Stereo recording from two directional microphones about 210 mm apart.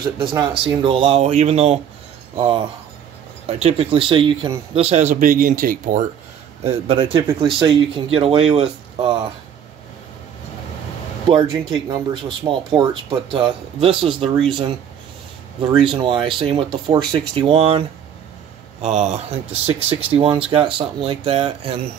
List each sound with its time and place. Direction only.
0.2 s speech: 20° right (ahead or behind); by 6.0 s 40° right (ahead or behind)
6.6 s speech: 30° right (ahead or behind)
11.2 s speech: 25° right (ahead or behind)
15.7 s speech: 25° right (ahead or behind)